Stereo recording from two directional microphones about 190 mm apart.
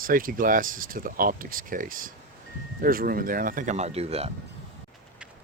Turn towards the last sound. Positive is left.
turn(degrees=-35)  # may be behind; listen again after turning